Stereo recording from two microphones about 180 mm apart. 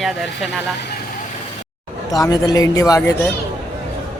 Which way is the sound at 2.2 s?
20° left (ahead or behind).